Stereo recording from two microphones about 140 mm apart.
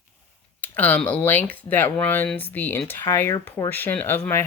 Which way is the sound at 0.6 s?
10° left (ahead or behind).